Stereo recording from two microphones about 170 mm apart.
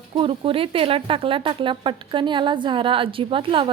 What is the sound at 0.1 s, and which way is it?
A woman's voice, 30° right (ahead or behind).